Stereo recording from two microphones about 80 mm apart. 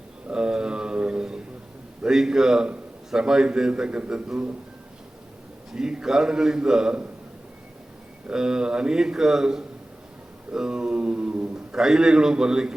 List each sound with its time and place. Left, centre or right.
0.3 s a sound: centre
2.0 s a man's voice: centre
5.7 s a man's voice: centre
8.3 s a man's voice: centre